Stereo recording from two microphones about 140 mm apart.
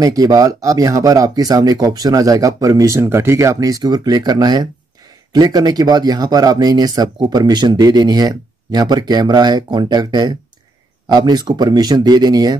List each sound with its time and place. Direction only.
0.0 s speech: 25° right (ahead or behind)